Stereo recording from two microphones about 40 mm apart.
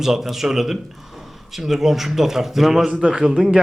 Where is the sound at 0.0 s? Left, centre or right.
Centre.